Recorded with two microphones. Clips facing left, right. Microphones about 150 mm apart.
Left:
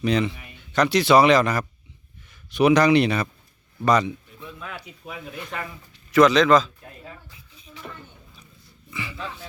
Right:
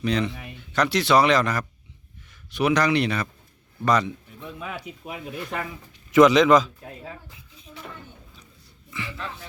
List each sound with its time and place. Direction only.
0.0 s speech: 10° left (ahead or behind)
3.8 s speech: centre (ahead or behind)
6.1 s a man's voice: 20° right (ahead or behind)
8.9 s speech: 5° left (ahead or behind)